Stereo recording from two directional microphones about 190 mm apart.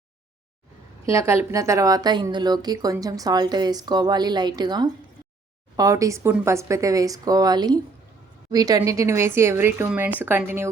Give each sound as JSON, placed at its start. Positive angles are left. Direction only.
{"t": 1.0, "sound": "a woman's voice", "side_deg": -15}